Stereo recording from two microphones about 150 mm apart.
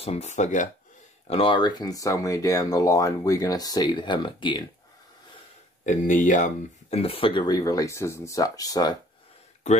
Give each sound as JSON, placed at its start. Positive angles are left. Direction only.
{"t": 0.0, "sound": "speech", "side_deg": 45}
{"t": 1.2, "sound": "speech", "side_deg": 40}
{"t": 5.9, "sound": "speech", "side_deg": 60}